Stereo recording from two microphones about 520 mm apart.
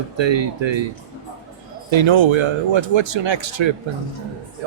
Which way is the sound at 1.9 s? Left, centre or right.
Right.